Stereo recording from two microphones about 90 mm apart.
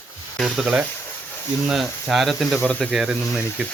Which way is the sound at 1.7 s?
5° right (ahead or behind).